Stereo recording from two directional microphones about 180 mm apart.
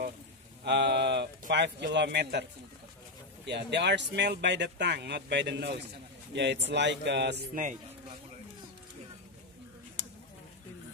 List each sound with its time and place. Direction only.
0.7 s speech: 75° right (ahead or behind)
3.4 s speech: 70° right (ahead or behind)